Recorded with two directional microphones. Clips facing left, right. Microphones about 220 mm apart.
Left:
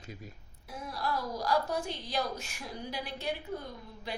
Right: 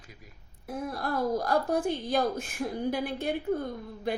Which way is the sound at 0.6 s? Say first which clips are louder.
Right 4 dB; 55° right (ahead or behind).